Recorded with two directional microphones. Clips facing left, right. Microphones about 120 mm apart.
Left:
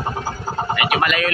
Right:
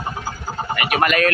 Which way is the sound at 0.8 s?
40° right (ahead or behind).